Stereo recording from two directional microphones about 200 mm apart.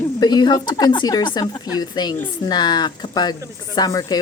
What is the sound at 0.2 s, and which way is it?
A woman's voice, 20° left (ahead or behind).